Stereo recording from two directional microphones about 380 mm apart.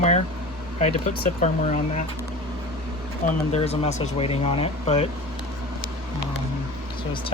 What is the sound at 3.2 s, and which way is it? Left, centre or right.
Speech, centre.